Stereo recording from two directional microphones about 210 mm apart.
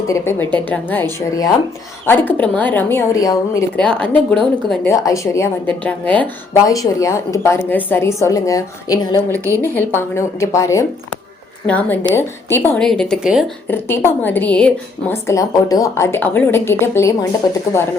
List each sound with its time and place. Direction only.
0.1 s a woman's voice: 10° left (ahead or behind)
3.8 s a woman's voice: 5° left (ahead or behind)
13.7 s a woman's voice: 10° left (ahead or behind)